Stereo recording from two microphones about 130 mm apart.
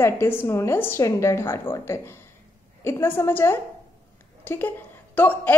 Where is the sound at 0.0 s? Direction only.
20° left (ahead or behind).